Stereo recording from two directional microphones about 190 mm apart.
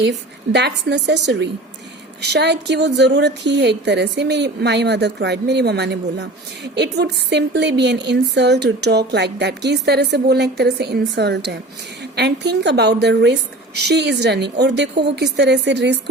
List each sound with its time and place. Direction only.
0.0 s a woman's voice: 65° right (ahead or behind)